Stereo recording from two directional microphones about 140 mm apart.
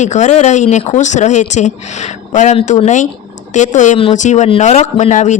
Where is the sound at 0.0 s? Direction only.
55° left (ahead or behind).